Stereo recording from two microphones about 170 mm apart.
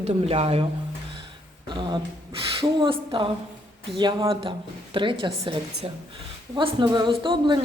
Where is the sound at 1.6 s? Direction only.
25° right (ahead or behind).